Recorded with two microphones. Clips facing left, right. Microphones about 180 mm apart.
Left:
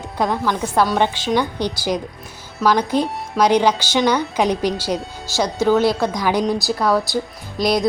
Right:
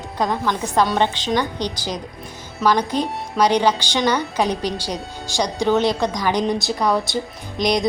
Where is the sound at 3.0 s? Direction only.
10° left (ahead or behind).